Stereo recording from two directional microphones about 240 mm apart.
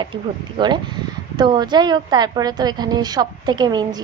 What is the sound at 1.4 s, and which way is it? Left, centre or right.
A woman's voice, centre.